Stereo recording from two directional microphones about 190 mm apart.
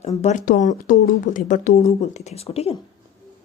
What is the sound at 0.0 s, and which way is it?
Speech, 35° left (ahead or behind).